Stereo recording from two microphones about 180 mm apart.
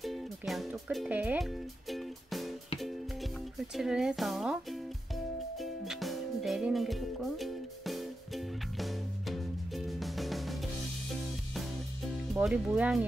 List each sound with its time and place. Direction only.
0.0 s music: centre (ahead or behind)
3.5 s speech: centre (ahead or behind)
5.6 s music: centre (ahead or behind)
12.4 s speech: 5° right (ahead or behind)